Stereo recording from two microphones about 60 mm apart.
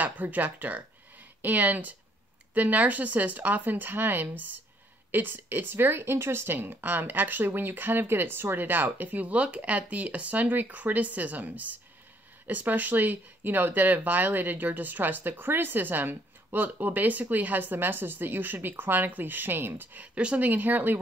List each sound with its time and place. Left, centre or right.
0.0 s speech: right